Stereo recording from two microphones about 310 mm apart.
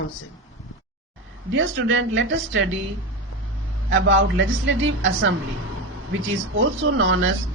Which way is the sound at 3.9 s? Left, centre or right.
Right.